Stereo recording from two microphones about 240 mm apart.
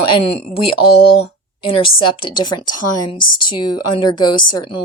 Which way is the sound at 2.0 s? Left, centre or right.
Centre.